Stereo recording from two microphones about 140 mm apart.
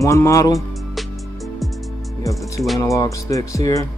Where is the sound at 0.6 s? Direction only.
Centre (ahead or behind).